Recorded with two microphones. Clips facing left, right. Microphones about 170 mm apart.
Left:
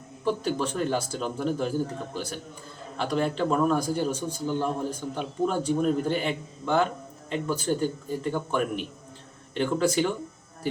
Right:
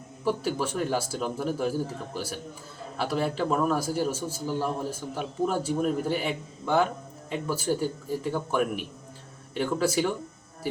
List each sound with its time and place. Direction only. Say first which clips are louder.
0.3 s a man's voice: left 1 dB; 10° right (ahead or behind)